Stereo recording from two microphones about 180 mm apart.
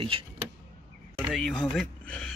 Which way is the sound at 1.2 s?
Centre (ahead or behind).